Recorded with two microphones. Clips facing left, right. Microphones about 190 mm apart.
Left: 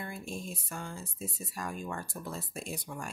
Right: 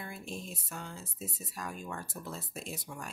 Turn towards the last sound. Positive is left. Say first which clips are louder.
# left 3 dB
turn(degrees=0)  # may be behind; listen again after turning